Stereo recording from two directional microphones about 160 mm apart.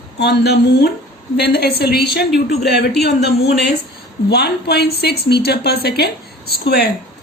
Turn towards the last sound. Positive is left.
turn(degrees=85)